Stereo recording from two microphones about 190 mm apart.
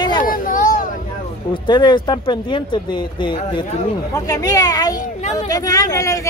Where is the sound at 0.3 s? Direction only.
45° left (ahead or behind).